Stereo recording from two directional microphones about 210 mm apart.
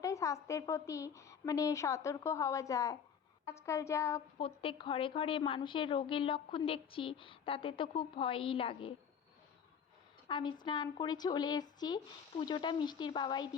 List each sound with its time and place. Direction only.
0.0 s a woman's voice: 15° left (ahead or behind)
4.4 s a woman's voice: 25° left (ahead or behind)
10.2 s a woman's voice: 20° left (ahead or behind)